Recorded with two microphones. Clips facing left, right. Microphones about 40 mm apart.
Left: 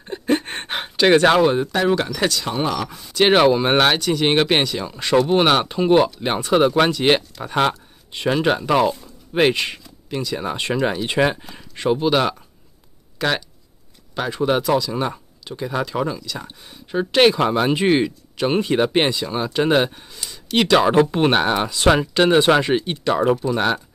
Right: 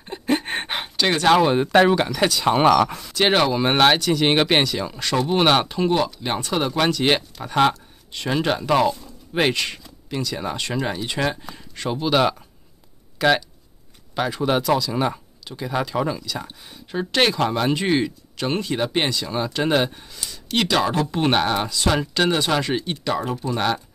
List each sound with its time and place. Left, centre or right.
0.0 s a sound: centre
1.9 s speech: centre
2.1 s speech: centre
2.6 s speech: right
3.2 s speech: centre
5.9 s speech: left; by 9.5 s centre
9.5 s a sound: centre
10.1 s speech: centre
12.1 s speech: centre
19.2 s speech: centre
20.8 s speech: left
21.6 s speech: left
21.9 s speech: centre